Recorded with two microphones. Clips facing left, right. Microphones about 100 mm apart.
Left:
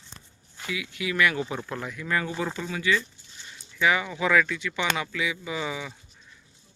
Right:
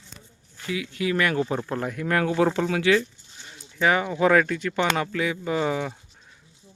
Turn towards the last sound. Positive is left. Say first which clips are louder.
# right 7 dB
turn(degrees=-50)  # may be behind; listen again after turning